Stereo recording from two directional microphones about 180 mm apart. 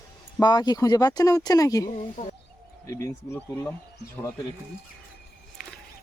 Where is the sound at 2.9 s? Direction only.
15° left (ahead or behind).